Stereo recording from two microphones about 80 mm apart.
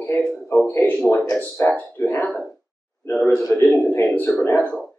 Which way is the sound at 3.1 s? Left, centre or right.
Left.